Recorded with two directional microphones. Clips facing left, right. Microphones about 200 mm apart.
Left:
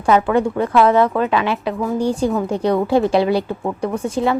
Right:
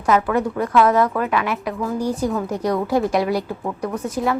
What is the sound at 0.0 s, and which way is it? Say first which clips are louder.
Speech: left 3 dB; 30° left (ahead or behind).